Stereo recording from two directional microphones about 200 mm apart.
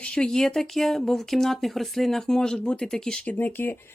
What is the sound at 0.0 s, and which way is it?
Speech, 5° left (ahead or behind).